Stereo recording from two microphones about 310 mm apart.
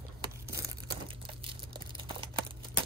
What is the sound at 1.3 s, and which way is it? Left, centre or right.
Crumpling, centre.